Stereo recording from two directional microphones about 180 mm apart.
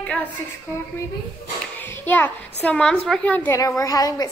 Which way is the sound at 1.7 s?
10° left (ahead or behind).